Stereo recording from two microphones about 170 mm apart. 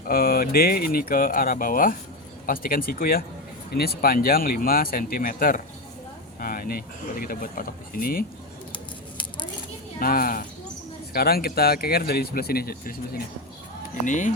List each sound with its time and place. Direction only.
0.1 s speech: 60° left (ahead or behind)
10.0 s speech: 60° left (ahead or behind)
13.9 s speech: 50° left (ahead or behind)